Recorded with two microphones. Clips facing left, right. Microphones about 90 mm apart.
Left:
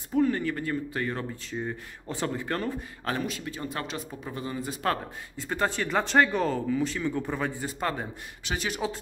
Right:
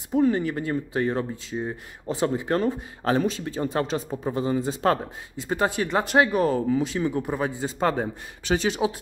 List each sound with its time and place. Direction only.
0.1 s speech: 20° right (ahead or behind)
5.4 s speech: 15° right (ahead or behind)
6.8 s speech: 20° right (ahead or behind)
7.8 s speech: 35° right (ahead or behind)
8.6 s speech: 20° right (ahead or behind)